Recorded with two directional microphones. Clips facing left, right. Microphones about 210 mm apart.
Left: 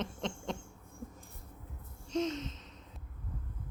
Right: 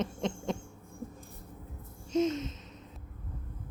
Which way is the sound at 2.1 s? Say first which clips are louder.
Right 5 dB; 5° right (ahead or behind).